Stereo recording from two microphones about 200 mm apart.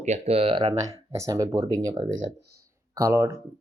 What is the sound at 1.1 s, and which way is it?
Speech, 15° right (ahead or behind).